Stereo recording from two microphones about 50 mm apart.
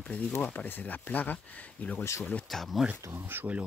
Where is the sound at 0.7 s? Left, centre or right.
Left.